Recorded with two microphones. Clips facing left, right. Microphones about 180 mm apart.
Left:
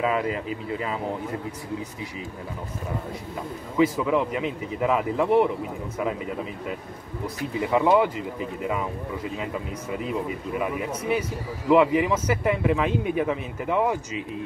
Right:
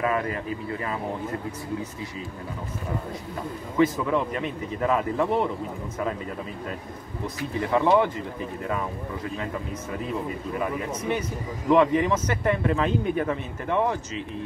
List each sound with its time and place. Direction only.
0.0 s speech: 15° left (ahead or behind)
3.7 s speech: 10° left (ahead or behind)
7.6 s speech: 10° left (ahead or behind)